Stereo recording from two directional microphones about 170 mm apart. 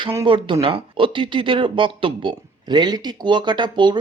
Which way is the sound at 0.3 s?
30° right (ahead or behind).